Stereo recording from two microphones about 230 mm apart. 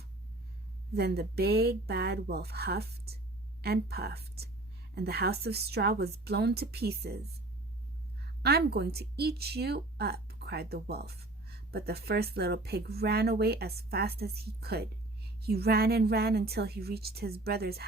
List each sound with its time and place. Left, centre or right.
0.9 s speech: right
8.4 s speech: right